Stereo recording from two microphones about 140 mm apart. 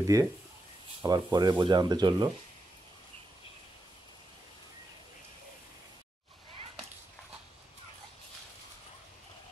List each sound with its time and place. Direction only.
0.0 s speech: 25° right (ahead or behind)